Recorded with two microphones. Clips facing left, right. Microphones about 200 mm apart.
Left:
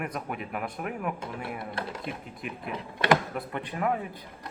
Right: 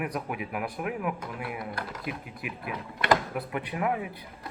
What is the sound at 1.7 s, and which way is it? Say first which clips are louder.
Speech: left 2 dB; 25° left (ahead or behind).